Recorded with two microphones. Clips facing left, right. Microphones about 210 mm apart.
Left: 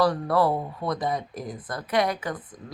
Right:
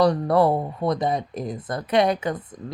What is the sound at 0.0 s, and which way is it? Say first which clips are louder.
Speech: right 4 dB; 25° right (ahead or behind).